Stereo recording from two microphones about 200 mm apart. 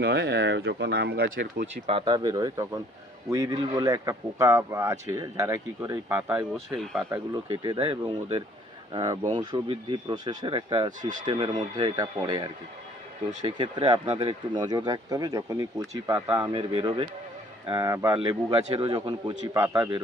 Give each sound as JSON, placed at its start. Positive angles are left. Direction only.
{"t": 0.0, "sound": "speech", "side_deg": -55}
{"t": 1.6, "sound": "speech", "side_deg": -25}
{"t": 6.7, "sound": "speech", "side_deg": 0}
{"t": 7.5, "sound": "speech", "side_deg": -25}
{"t": 11.0, "sound": "speech", "side_deg": -40}
{"t": 11.3, "sound": "speech", "side_deg": -25}
{"t": 16.6, "sound": "speech", "side_deg": -25}